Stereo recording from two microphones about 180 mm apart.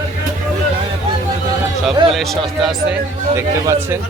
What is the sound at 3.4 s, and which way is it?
Speech, 15° right (ahead or behind).